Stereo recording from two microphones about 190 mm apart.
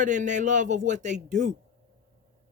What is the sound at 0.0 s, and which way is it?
Speech, 40° right (ahead or behind).